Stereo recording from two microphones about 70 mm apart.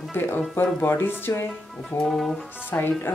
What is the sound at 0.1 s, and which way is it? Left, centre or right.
Speech, left.